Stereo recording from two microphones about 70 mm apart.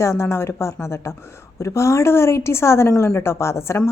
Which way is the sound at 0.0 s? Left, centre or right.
Left.